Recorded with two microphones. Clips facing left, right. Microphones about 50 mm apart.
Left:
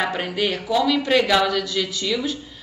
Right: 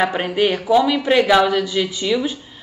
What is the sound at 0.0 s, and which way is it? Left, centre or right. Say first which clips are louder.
Speech: right 5 dB; centre.